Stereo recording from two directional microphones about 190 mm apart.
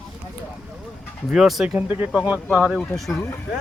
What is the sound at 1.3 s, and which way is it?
Speech, centre (ahead or behind).